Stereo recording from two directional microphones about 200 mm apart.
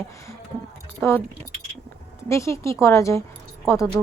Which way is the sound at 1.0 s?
10° left (ahead or behind).